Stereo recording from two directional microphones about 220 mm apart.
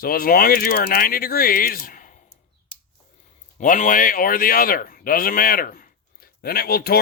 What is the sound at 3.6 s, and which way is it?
A man's voice, 35° left (ahead or behind).